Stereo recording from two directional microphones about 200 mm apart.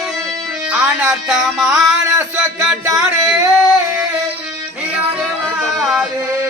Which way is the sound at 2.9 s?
15° right (ahead or behind).